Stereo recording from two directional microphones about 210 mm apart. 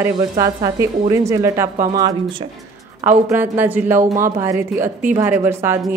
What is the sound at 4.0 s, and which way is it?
Speech, 40° right (ahead or behind).